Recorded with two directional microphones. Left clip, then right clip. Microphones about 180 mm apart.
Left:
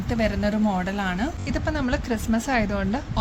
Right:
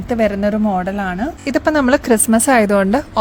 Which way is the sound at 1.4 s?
90° right.